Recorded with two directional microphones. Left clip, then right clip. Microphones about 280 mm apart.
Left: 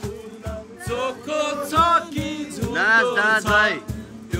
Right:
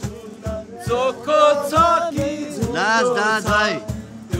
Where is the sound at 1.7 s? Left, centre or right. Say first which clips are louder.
Right 2 dB; centre.